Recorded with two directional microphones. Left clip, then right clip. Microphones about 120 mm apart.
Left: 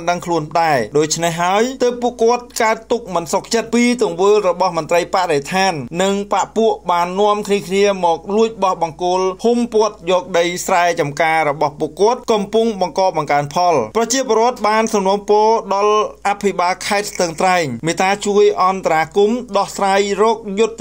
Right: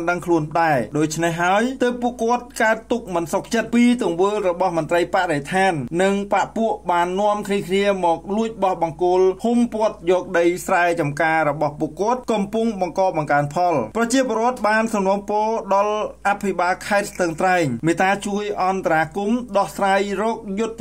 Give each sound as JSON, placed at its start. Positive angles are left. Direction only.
{"t": 0.0, "sound": "speech", "side_deg": 20}